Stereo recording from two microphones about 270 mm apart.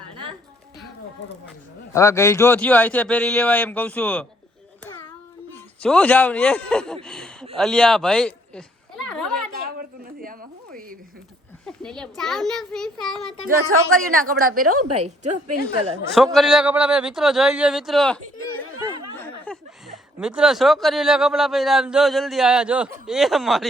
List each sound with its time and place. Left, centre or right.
1.9 s speech: centre
5.8 s speech: centre
10.2 s a sound: right
11.6 s speech: centre
13.7 s speech: right
14.6 s a woman's voice: right
15.0 s a woman's voice: right
16.1 s speech: centre